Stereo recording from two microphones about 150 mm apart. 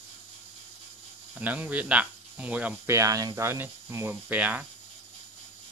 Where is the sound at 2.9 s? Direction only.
20° right (ahead or behind).